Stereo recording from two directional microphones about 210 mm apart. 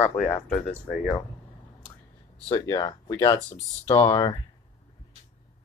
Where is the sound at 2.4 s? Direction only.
20° left (ahead or behind).